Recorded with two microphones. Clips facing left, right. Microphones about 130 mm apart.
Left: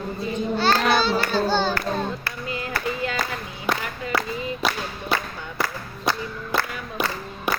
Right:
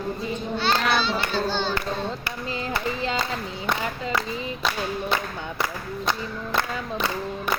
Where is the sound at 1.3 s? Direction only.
40° left (ahead or behind).